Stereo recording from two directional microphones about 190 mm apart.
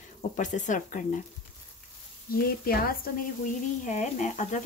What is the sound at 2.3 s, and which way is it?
Speech, 50° left (ahead or behind).